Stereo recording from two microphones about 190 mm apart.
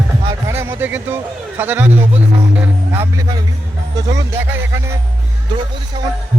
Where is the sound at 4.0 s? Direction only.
20° right (ahead or behind).